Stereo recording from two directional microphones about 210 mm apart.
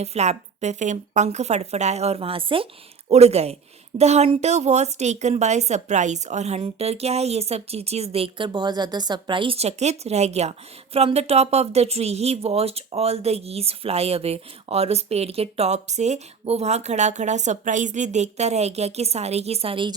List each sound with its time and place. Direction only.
0.0 s speech: 30° right (ahead or behind)